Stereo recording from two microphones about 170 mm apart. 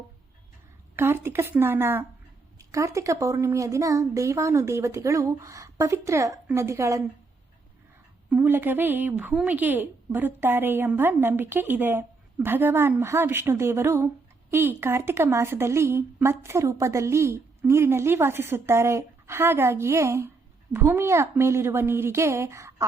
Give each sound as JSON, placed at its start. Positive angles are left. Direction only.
{"t": 0.9, "sound": "a woman's voice", "side_deg": -15}
{"t": 8.3, "sound": "a woman's voice", "side_deg": -10}